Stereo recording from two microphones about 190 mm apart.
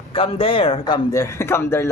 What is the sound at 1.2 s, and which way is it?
Speech, 15° left (ahead or behind).